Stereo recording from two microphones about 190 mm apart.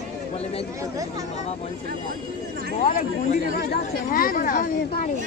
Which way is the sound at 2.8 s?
45° left (ahead or behind).